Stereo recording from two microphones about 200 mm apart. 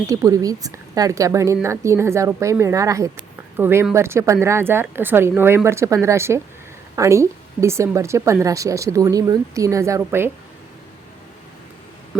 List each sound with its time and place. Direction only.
0.1 s a woman's voice: 15° right (ahead or behind)